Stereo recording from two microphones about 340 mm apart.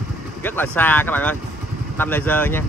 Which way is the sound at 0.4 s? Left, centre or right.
Centre.